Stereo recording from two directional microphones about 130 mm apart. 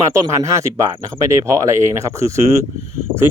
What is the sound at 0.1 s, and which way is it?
Speech, 25° right (ahead or behind).